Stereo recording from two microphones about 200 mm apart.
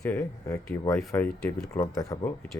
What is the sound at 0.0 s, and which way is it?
Speech, 10° left (ahead or behind).